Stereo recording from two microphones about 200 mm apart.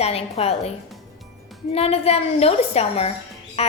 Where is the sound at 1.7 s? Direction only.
30° left (ahead or behind).